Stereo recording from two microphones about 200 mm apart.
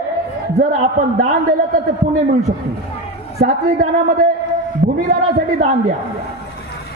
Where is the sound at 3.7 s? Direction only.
40° right (ahead or behind).